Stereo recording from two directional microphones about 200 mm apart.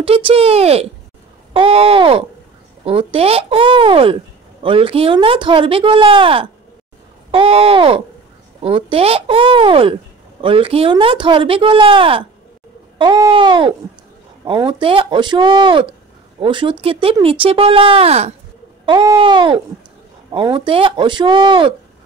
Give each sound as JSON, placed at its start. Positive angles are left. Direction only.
{"t": 0.0, "sound": "speech", "side_deg": -30}